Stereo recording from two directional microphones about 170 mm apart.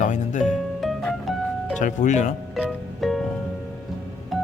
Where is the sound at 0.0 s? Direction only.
45° left (ahead or behind).